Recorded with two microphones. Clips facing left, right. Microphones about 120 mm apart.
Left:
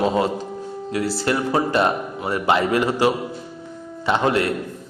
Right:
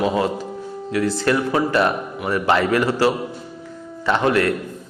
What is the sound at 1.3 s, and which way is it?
A man's voice, 25° left (ahead or behind).